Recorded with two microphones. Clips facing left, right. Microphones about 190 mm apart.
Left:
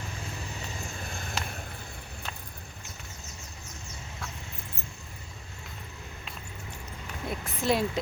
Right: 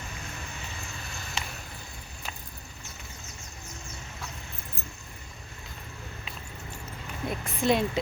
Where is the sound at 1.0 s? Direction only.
50° left (ahead or behind).